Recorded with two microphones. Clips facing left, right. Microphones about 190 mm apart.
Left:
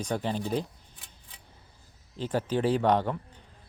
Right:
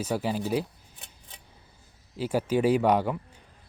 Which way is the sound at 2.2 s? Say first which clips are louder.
Right 3 dB; 10° right (ahead or behind).